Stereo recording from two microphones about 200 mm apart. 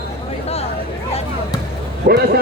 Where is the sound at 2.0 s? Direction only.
45° right (ahead or behind).